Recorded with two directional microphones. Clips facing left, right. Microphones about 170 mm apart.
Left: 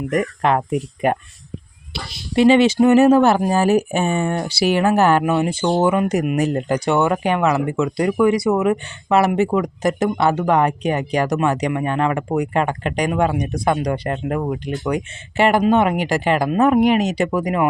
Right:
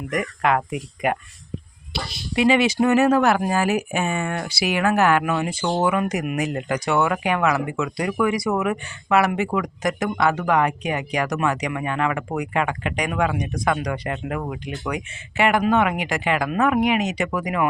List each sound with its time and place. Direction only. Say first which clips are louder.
0.1 s speech: left 3 dB; 30° left (ahead or behind)
2.3 s speech: left 5 dB; 30° left (ahead or behind)